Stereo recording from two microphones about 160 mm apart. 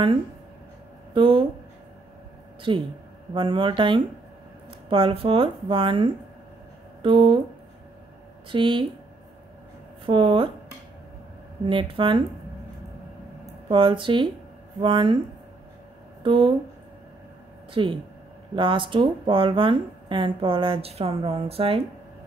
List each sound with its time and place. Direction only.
1.1 s speech: 35° right (ahead or behind)
2.7 s speech: 30° right (ahead or behind)
8.5 s speech: 30° right (ahead or behind)
10.0 s speech: 30° right (ahead or behind)
11.6 s speech: 30° right (ahead or behind)
13.7 s speech: 35° right (ahead or behind)
16.2 s speech: 30° right (ahead or behind)
17.8 s speech: 30° right (ahead or behind)